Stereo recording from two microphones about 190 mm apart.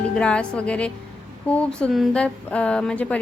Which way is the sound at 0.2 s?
5° left (ahead or behind).